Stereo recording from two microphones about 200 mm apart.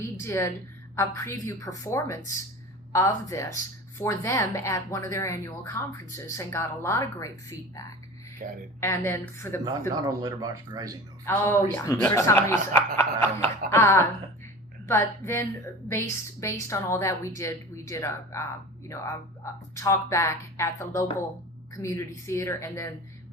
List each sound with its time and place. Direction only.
0.0 s a woman's voice: 15° left (ahead or behind)
8.4 s speech: 40° right (ahead or behind)
8.8 s speech: 15° left (ahead or behind)
9.9 s speech: 20° right (ahead or behind)
11.3 s speech: 10° left (ahead or behind)